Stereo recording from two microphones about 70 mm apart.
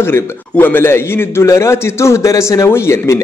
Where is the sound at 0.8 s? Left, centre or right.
Left.